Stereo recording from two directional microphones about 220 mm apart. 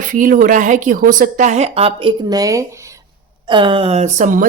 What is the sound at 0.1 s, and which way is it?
Speech, 40° right (ahead or behind).